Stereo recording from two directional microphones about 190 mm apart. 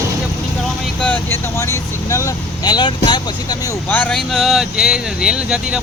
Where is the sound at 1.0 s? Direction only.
10° left (ahead or behind).